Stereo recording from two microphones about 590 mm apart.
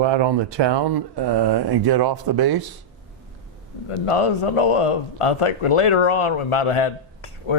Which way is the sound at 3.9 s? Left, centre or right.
Left.